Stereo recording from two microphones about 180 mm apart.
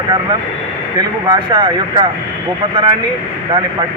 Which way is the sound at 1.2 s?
25° right (ahead or behind).